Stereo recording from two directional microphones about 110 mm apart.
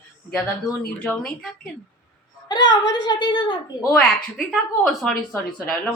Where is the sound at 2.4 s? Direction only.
40° left (ahead or behind).